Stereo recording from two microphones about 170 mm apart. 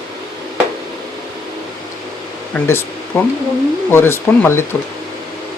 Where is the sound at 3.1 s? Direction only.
15° left (ahead or behind).